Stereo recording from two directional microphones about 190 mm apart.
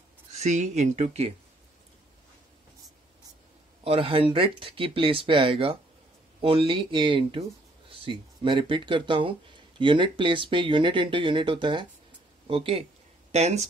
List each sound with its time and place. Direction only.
0.3 s speech: 35° right (ahead or behind)
3.8 s speech: 30° right (ahead or behind)